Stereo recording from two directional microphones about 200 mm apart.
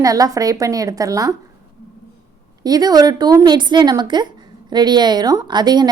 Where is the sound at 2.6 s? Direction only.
20° right (ahead or behind).